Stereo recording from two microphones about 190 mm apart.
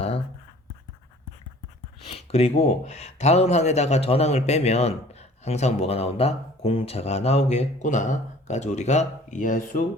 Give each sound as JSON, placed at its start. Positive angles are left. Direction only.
{"t": 2.0, "sound": "speech", "side_deg": 30}